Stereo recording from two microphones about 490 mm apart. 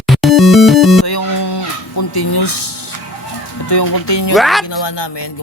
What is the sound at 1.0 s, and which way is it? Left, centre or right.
Music, left.